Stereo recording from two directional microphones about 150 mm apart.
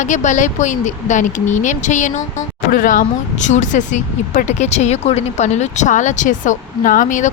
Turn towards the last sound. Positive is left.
turn(degrees=55)  # may be behind; listen again after turning